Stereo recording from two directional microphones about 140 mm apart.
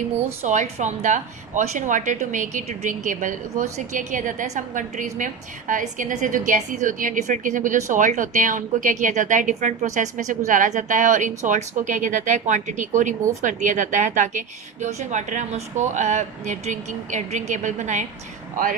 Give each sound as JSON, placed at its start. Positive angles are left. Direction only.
{"t": 0.4, "sound": "a woman's voice", "side_deg": -55}